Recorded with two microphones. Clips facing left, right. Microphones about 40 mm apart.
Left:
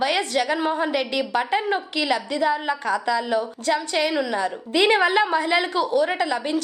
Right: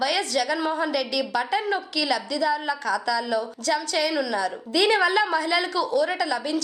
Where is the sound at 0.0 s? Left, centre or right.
Left.